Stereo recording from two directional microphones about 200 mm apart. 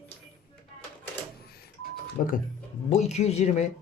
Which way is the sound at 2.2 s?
40° left (ahead or behind).